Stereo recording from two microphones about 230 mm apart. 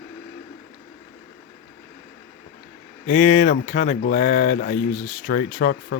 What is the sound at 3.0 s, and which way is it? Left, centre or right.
Speech, left.